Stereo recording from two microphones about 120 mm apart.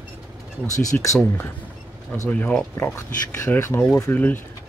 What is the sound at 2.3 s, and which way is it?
Speech, 10° left (ahead or behind).